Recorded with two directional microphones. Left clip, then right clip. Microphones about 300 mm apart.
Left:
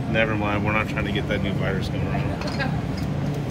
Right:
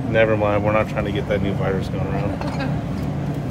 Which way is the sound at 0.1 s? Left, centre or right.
Right.